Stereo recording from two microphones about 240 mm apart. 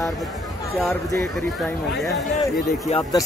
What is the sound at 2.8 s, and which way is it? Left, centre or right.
Speech, left.